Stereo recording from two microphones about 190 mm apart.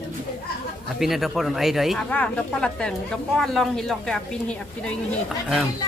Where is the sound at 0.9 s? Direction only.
Centre (ahead or behind).